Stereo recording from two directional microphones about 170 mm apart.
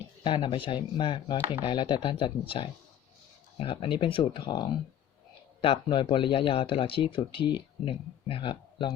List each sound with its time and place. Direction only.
0.2 s speech: 30° left (ahead or behind)